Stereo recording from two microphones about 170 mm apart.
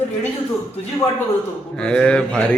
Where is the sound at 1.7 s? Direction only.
5° left (ahead or behind).